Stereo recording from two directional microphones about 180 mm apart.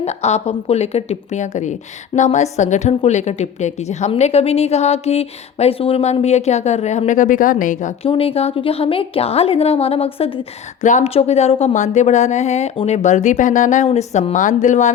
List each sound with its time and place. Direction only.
0.0 s a woman's voice: 35° left (ahead or behind)
8.1 s a woman's voice: 30° left (ahead or behind)